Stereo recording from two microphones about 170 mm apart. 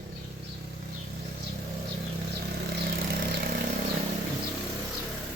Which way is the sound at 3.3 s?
65° right (ahead or behind).